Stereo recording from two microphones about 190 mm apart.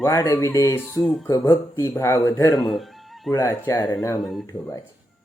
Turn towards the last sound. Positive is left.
turn(degrees=0)  # may be behind; listen again after turning